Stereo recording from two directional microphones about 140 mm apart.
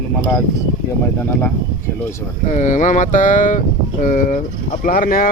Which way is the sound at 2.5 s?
60° left (ahead or behind).